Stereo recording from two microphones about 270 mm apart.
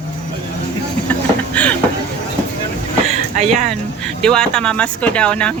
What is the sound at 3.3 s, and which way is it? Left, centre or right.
Speech, right.